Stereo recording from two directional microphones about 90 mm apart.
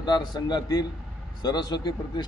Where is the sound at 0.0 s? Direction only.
55° left (ahead or behind).